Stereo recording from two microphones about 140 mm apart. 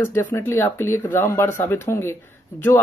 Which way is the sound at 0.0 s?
15° left (ahead or behind).